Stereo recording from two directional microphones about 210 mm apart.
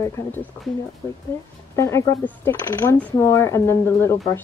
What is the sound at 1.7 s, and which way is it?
Speech, 15° left (ahead or behind).